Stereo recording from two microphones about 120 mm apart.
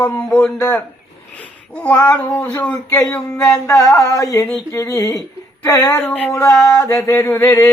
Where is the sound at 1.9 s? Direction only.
25° left (ahead or behind).